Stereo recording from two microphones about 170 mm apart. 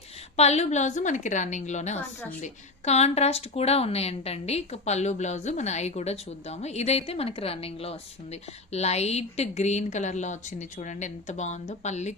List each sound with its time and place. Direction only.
0.3 s a woman's voice: 40° left (ahead or behind)